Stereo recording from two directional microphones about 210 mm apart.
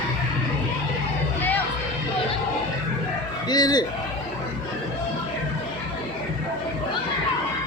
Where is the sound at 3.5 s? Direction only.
20° left (ahead or behind).